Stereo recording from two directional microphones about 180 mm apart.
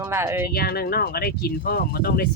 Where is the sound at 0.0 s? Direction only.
15° right (ahead or behind).